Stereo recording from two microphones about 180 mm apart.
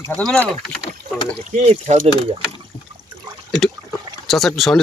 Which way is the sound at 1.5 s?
40° right (ahead or behind).